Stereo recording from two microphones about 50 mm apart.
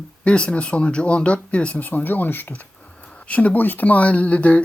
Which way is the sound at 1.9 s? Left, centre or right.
Left.